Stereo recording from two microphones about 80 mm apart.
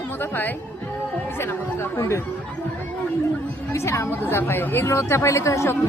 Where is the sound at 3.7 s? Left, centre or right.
Left.